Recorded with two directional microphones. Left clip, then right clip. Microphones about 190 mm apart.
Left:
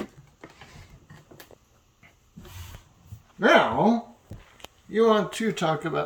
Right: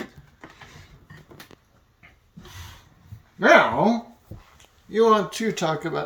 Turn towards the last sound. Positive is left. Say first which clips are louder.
# even
turn(degrees=0)  # may be behind; listen again after turning